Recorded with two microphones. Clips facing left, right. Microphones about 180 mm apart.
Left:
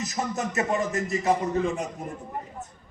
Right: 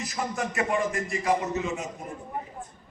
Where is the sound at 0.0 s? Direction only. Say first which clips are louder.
Left 2 dB; 20° left (ahead or behind).